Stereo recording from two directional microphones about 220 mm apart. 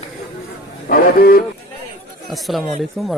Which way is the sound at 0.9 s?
40° left (ahead or behind).